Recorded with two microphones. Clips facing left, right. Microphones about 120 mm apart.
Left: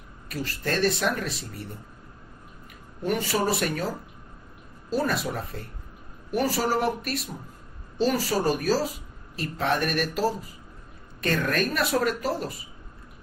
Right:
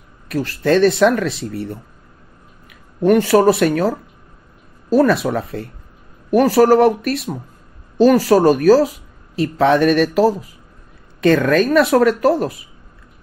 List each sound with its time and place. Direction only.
0.3 s speech: 85° right
3.0 s speech: 70° right (ahead or behind)
4.9 s speech: 85° right
6.3 s speech: 65° right (ahead or behind)
9.3 s speech: 90° right
11.1 s speech: 90° right; by 12.5 s 65° right (ahead or behind)